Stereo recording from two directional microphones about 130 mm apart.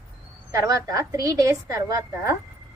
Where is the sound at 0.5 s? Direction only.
25° right (ahead or behind).